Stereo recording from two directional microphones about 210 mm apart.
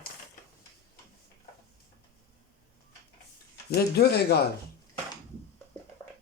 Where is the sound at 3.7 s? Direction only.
50° left (ahead or behind).